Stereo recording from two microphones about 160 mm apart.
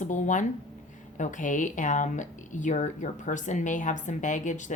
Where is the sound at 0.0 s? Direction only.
50° left (ahead or behind).